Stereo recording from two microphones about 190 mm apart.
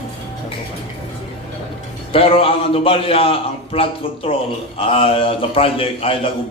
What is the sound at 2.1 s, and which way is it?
A man's voice, 30° left (ahead or behind).